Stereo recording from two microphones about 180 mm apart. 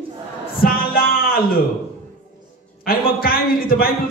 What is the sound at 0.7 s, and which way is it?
Music, 55° left (ahead or behind).